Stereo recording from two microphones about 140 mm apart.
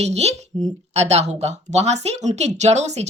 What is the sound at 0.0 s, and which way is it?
A woman's voice, 50° right (ahead or behind).